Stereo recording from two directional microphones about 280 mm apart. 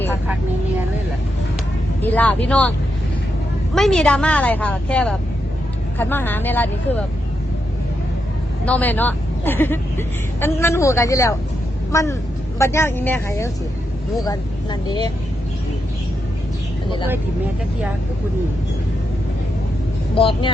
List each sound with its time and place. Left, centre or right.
2.0 s a woman's voice: centre
3.8 s a woman's voice: centre
8.6 s a woman's voice: centre
20.1 s speech: centre